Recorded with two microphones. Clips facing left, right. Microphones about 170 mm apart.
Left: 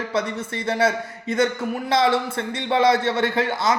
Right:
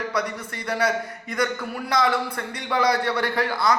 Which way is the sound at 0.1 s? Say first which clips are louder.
Left 3 dB; 25° left (ahead or behind).